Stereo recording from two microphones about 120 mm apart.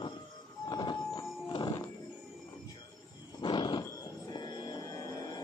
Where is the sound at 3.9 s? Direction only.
35° left (ahead or behind).